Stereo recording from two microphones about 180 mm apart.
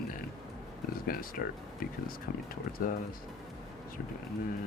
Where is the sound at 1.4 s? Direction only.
55° left (ahead or behind).